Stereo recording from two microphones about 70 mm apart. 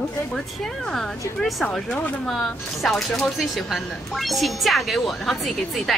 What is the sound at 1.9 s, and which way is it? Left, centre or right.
Speech, left.